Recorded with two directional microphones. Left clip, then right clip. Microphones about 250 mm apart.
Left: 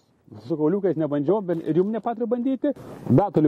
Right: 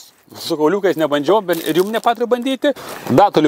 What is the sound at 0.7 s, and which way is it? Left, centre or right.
Speech, centre.